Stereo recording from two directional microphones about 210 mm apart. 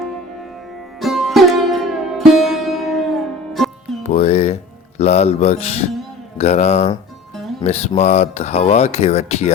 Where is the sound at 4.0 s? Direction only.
30° left (ahead or behind).